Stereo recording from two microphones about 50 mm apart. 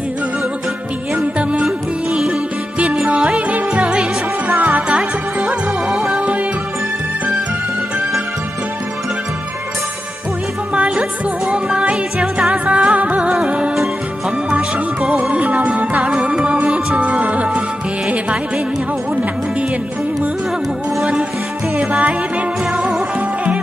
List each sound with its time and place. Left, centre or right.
1.1 s music: right
2.8 s music: right
3.3 s music: right
4.6 s music: right
10.7 s music: right
15.3 s music: right
16.1 s music: centre
21.7 s music: centre